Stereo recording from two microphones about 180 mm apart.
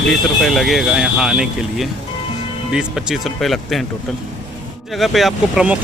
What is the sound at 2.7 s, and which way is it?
Speech, centre (ahead or behind).